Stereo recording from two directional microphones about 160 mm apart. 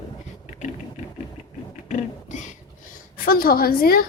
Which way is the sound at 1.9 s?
50° left (ahead or behind).